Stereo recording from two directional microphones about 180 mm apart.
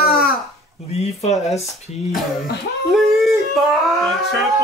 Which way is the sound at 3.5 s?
Centre (ahead or behind).